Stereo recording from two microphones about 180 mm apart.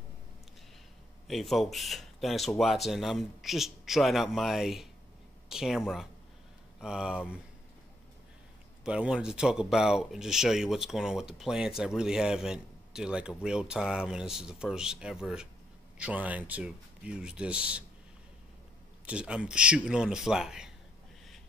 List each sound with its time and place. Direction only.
1.2 s speech: centre (ahead or behind)
8.8 s speech: 5° right (ahead or behind)
19.0 s speech: 5° right (ahead or behind)